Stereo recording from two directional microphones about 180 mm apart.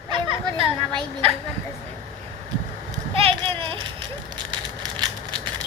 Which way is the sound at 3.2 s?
30° right (ahead or behind).